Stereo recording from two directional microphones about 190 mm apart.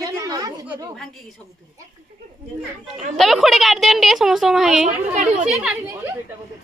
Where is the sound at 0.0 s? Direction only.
20° right (ahead or behind).